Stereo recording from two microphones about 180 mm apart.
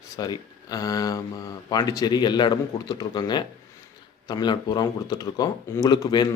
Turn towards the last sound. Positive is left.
turn(degrees=25)  # may be behind; listen again after turning